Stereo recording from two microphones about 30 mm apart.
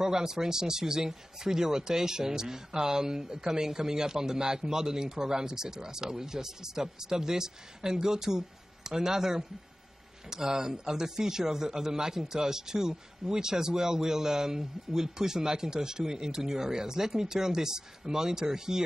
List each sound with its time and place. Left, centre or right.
0.0 s speech: centre